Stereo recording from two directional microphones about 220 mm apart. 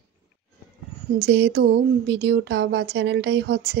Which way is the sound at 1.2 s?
50° right (ahead or behind).